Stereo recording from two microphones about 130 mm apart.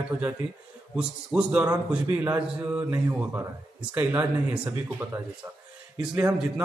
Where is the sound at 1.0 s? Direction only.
10° right (ahead or behind).